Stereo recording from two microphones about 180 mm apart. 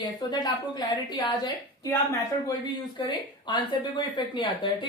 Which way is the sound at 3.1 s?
25° left (ahead or behind).